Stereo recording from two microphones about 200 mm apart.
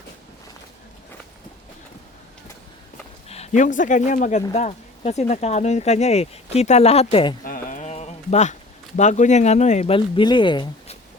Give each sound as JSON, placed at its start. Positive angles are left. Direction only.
{"t": 3.2, "sound": "speech", "side_deg": 30}
{"t": 7.4, "sound": "a sound", "side_deg": 45}
{"t": 9.0, "sound": "speech", "side_deg": 35}